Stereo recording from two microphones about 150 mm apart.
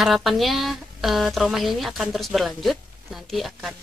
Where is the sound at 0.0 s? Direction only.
Centre (ahead or behind).